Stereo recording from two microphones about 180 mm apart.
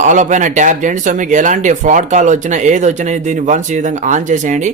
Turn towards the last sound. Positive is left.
turn(degrees=-45)  # may be behind; listen again after turning